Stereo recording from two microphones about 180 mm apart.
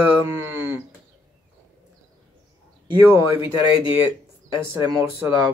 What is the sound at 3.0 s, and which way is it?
Speech, 15° right (ahead or behind).